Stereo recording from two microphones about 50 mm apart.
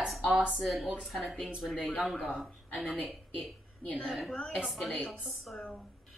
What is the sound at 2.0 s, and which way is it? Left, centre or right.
Speech, centre.